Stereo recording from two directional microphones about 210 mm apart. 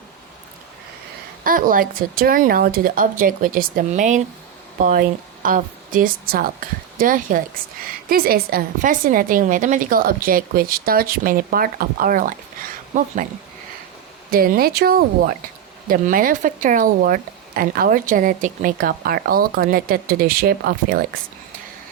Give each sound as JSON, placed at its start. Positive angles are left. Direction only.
{"t": 1.5, "sound": "a woman's voice", "side_deg": -40}
{"t": 14.3, "sound": "speech", "side_deg": -45}